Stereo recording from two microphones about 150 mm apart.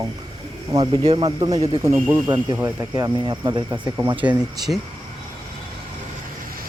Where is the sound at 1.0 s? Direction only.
35° right (ahead or behind).